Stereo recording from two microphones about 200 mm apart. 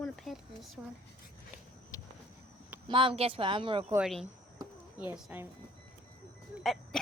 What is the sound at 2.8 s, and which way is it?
Speech, 25° right (ahead or behind).